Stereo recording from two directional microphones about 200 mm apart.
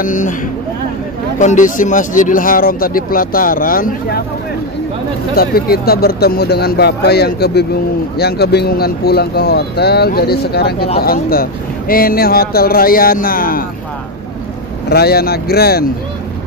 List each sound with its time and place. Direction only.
0.0 s speech: 40° left (ahead or behind)
1.4 s speech: 40° left (ahead or behind)
5.3 s speech: 50° left (ahead or behind)
14.9 s speech: 50° left (ahead or behind)